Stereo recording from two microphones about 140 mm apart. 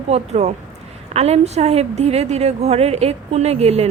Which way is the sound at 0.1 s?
50° right (ahead or behind).